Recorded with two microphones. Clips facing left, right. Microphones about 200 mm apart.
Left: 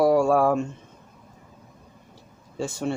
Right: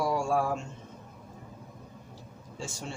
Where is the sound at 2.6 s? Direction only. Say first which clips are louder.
Left 12 dB; 60° left (ahead or behind).